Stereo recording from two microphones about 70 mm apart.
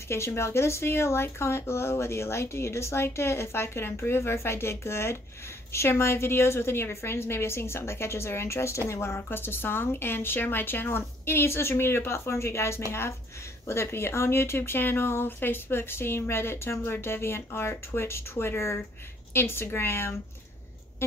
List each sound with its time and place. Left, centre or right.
0.1 s a woman's voice: left